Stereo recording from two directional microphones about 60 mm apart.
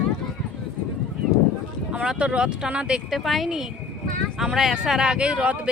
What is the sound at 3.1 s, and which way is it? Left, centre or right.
Speech, centre.